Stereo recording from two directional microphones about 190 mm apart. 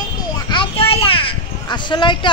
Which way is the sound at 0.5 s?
30° left (ahead or behind).